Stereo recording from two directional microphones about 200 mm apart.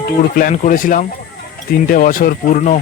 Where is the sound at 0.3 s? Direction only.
40° left (ahead or behind).